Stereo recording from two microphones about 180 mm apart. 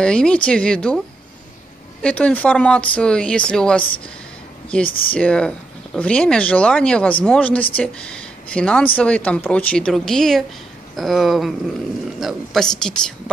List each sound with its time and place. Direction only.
0.0 s speech: 5° left (ahead or behind)
4.8 s speech: 55° left (ahead or behind)
5.1 s speech: 5° left (ahead or behind)